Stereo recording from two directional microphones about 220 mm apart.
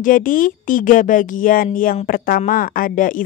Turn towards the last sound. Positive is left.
turn(degrees=40)  # may be behind; listen again after turning